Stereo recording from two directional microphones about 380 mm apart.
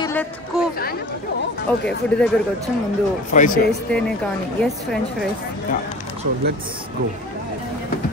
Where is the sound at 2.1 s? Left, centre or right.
Centre.